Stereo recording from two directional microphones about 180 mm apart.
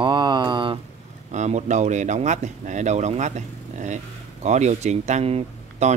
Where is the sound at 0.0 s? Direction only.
25° right (ahead or behind).